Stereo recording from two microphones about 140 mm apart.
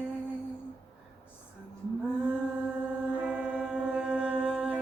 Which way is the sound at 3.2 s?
10° right (ahead or behind).